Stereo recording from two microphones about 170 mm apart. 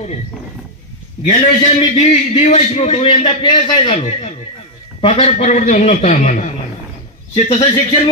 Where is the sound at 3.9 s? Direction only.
40° left (ahead or behind).